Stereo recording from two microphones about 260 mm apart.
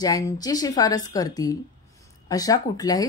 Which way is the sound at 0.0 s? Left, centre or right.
Centre.